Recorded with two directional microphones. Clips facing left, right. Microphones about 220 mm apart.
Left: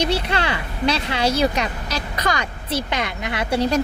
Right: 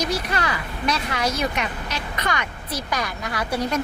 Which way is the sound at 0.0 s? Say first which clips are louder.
Left 3 dB; 30° left (ahead or behind).